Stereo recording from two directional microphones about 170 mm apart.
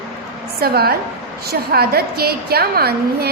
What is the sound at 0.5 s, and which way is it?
A woman's voice, 65° right (ahead or behind).